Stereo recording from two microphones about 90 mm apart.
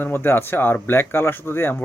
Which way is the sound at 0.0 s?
25° left (ahead or behind).